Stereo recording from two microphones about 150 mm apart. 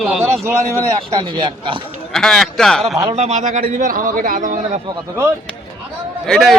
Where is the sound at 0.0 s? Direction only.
Centre (ahead or behind).